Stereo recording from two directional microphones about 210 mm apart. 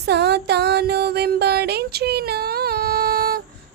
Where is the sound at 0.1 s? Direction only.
50° right (ahead or behind).